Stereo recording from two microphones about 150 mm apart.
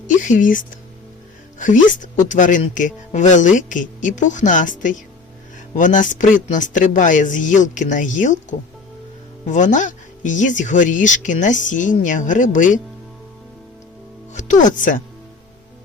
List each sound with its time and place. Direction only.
0.1 s speech: 55° left (ahead or behind)
14.3 s speech: 55° left (ahead or behind)